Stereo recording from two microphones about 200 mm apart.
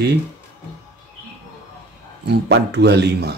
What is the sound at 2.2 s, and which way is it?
Speech, 60° right (ahead or behind).